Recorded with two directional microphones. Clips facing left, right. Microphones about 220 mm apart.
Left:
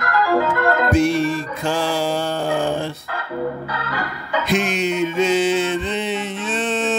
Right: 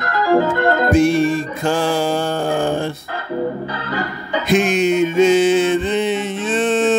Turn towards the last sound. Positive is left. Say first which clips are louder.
# right 6 dB
turn(degrees=-50)  # may be behind; listen again after turning